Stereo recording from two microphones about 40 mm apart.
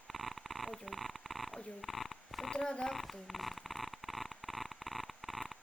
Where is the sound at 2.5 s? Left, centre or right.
Left.